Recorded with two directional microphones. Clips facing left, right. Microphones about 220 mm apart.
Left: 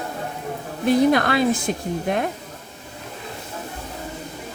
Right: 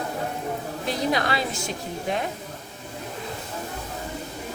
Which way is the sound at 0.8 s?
55° left (ahead or behind).